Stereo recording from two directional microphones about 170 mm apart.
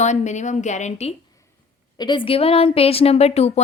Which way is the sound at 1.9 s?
25° left (ahead or behind).